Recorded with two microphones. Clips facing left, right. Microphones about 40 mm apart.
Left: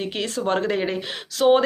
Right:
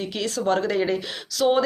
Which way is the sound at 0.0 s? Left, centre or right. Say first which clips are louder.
Even; left.